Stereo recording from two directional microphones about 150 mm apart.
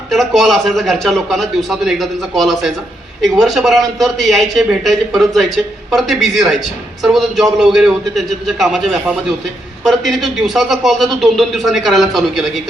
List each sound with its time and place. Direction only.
0.1 s speech: centre (ahead or behind)